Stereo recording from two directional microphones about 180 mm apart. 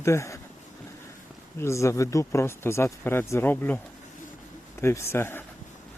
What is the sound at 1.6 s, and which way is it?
Speech, 15° left (ahead or behind).